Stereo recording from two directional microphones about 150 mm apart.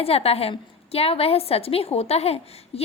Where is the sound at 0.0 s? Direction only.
40° left (ahead or behind).